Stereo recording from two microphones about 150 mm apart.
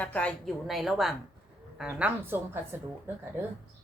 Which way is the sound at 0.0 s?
10° left (ahead or behind).